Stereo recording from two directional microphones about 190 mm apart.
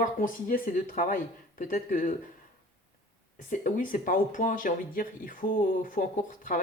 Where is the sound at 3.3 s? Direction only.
45° left (ahead or behind).